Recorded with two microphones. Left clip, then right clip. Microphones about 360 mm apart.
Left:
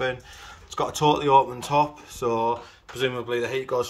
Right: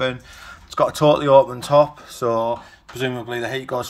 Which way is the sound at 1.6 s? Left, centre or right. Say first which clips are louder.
Right 7 dB; centre.